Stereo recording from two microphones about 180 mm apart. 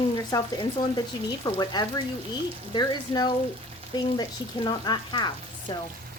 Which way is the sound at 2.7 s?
25° left (ahead or behind).